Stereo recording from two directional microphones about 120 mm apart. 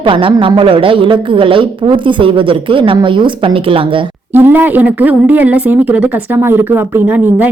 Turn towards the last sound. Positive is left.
turn(degrees=-15)  # may be behind; listen again after turning